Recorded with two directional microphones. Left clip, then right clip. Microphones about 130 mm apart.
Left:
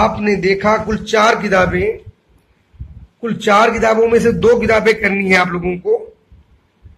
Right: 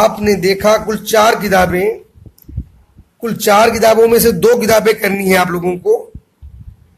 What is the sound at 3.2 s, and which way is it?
Speech, 65° right (ahead or behind).